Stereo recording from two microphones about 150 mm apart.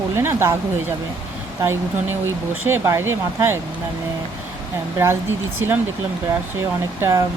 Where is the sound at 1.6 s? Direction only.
15° right (ahead or behind).